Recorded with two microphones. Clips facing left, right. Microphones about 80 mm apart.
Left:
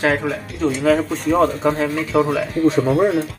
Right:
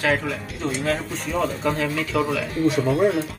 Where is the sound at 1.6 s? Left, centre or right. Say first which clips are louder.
Left 4 dB; left.